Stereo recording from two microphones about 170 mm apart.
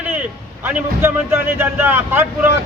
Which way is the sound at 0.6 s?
10° right (ahead or behind).